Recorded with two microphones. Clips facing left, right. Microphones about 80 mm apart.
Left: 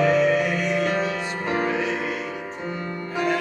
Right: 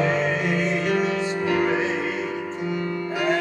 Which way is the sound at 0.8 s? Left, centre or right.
Left.